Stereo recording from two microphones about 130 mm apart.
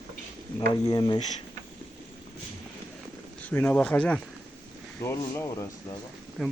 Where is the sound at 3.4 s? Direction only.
15° left (ahead or behind).